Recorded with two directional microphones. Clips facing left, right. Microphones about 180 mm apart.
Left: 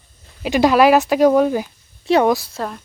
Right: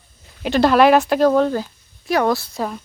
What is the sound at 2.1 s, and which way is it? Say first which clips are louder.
Speech: left 4 dB; 25° left (ahead or behind).